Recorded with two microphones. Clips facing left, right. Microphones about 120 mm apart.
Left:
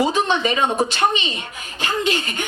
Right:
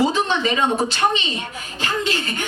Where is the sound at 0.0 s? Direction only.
15° left (ahead or behind).